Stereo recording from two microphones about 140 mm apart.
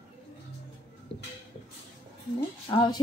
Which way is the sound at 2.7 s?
35° left (ahead or behind).